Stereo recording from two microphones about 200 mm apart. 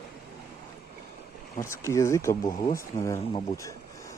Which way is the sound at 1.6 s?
15° left (ahead or behind).